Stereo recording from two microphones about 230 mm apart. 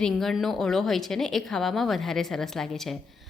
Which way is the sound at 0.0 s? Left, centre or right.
Centre.